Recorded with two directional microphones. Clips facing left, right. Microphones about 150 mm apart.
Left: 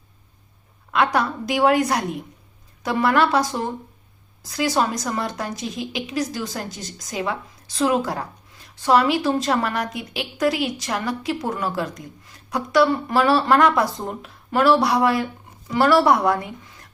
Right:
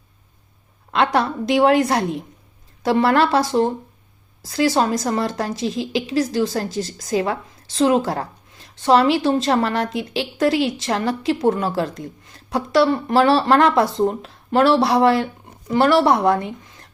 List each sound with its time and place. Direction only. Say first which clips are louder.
0.9 s a woman's voice: right 2 dB; 25° right (ahead or behind)